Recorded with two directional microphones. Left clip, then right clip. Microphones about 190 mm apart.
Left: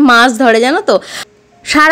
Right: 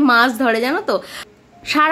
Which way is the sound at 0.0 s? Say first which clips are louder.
Left 7 dB; 35° left (ahead or behind).